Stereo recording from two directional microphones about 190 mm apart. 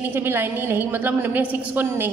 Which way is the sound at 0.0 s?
10° right (ahead or behind).